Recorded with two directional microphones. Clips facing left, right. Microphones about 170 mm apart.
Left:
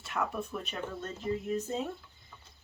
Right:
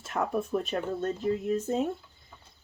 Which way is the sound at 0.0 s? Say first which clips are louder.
Right 3 dB; 45° right (ahead or behind).